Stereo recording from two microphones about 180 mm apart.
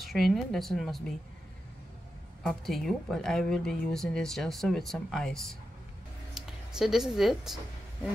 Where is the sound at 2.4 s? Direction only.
Centre (ahead or behind).